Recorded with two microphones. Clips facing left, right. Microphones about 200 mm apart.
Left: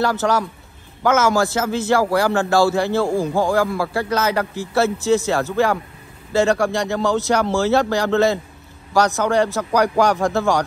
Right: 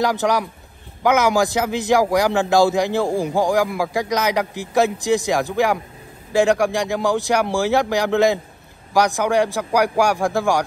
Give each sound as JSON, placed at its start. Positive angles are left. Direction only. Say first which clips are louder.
{"t": 0.0, "sound": "a man's voice", "louder": "even", "side_deg": -15}